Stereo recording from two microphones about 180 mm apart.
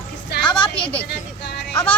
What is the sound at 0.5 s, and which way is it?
Speech, 30° left (ahead or behind).